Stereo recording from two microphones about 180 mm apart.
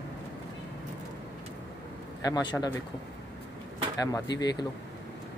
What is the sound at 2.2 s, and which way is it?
Speech, 20° left (ahead or behind).